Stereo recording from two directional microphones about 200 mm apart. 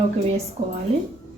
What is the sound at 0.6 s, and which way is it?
Speech, 40° right (ahead or behind).